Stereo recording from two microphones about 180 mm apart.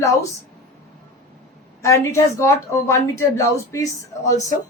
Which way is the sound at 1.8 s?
15° left (ahead or behind).